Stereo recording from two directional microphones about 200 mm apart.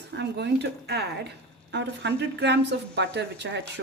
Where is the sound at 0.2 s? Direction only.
55° right (ahead or behind).